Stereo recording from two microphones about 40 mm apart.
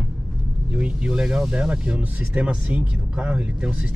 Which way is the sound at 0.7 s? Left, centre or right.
Right.